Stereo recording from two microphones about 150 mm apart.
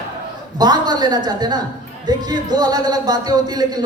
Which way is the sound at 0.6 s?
25° right (ahead or behind).